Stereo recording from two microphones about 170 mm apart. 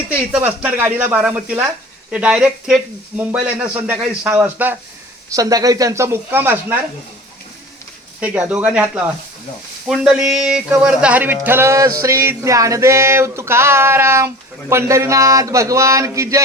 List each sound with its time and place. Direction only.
0.3 s speech: 5° right (ahead or behind)
5.3 s speech: 20° right (ahead or behind)
8.2 s speech: 10° right (ahead or behind)